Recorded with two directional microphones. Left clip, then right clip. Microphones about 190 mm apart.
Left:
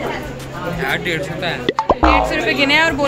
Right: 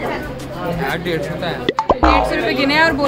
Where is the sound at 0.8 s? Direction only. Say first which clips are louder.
Left 2 dB; 20° right (ahead or behind).